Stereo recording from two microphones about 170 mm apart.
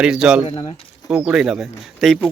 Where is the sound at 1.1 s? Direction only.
5° right (ahead or behind).